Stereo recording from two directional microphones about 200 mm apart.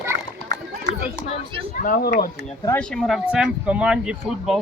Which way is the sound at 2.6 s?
5° left (ahead or behind).